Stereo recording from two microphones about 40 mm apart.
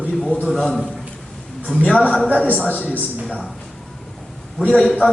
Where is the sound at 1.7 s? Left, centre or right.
Centre.